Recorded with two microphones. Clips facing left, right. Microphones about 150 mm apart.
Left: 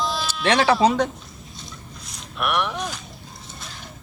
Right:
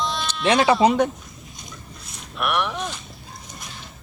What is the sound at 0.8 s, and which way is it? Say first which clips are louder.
Speech: right 1 dB; 15° right (ahead or behind).